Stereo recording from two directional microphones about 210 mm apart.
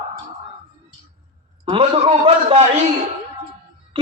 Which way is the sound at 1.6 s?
25° right (ahead or behind).